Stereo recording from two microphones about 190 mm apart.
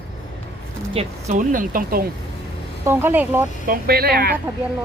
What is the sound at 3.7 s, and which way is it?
Speech, 55° right (ahead or behind).